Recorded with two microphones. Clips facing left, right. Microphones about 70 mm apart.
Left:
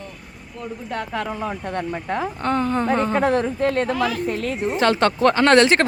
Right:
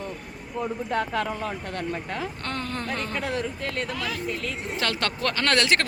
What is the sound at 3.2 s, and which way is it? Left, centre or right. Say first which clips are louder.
Speech: left 10 dB; left.